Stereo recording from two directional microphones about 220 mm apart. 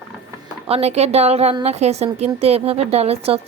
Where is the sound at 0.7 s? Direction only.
30° right (ahead or behind).